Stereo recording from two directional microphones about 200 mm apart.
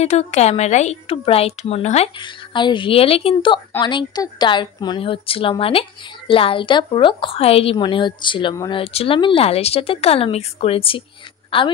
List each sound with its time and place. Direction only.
0.0 s a woman's voice: 35° left (ahead or behind)